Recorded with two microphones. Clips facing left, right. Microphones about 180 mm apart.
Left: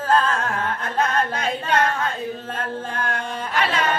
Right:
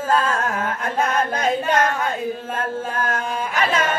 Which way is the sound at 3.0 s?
45° right (ahead or behind).